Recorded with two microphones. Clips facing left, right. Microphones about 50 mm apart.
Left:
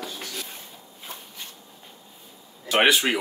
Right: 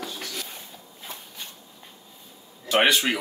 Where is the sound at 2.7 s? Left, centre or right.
Centre.